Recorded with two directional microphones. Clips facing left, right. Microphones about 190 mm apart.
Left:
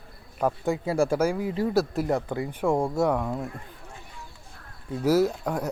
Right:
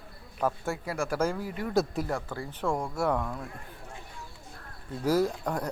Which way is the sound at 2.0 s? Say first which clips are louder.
Left 7 dB; 20° left (ahead or behind).